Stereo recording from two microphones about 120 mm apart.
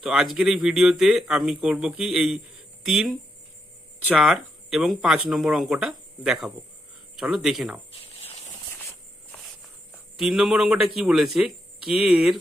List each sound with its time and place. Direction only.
0.0 s speech: 5° right (ahead or behind)
7.9 s cricket: 60° left (ahead or behind)
10.2 s speech: 5° right (ahead or behind)